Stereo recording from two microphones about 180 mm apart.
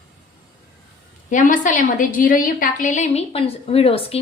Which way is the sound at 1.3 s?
45° left (ahead or behind).